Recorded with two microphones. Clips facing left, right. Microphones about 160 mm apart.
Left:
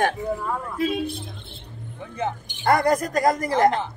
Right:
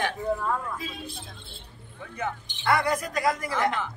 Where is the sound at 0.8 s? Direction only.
65° left (ahead or behind).